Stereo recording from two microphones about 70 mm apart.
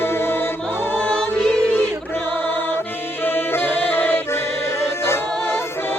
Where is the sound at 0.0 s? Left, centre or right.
Left.